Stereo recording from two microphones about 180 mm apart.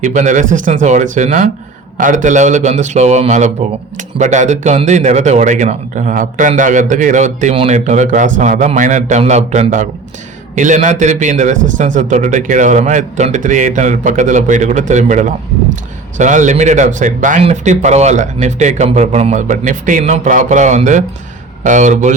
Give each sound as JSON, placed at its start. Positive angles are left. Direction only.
{"t": 0.0, "sound": "speech", "side_deg": -45}